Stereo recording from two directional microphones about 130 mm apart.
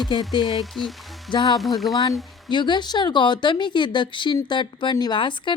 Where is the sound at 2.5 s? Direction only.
35° left (ahead or behind).